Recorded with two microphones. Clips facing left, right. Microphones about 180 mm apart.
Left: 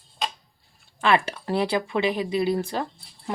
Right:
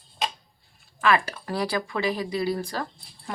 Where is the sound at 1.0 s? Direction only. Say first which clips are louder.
Left 1 dB; 25° left (ahead or behind).